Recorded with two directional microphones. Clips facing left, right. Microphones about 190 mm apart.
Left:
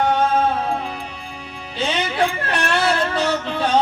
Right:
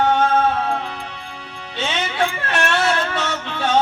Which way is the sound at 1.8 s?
35° left (ahead or behind).